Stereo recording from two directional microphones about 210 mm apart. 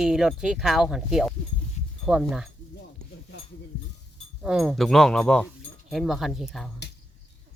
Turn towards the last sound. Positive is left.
turn(degrees=0)  # may be behind; listen again after turning